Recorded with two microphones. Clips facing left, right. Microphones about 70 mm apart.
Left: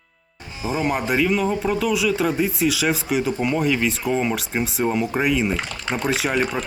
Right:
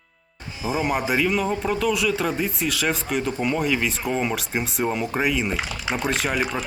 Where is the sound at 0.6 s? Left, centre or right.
Centre.